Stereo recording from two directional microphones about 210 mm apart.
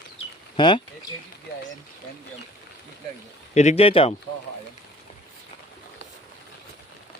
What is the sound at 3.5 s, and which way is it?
Speech, 30° left (ahead or behind).